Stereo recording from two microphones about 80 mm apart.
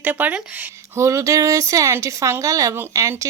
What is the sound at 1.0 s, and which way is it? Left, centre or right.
Speech, right.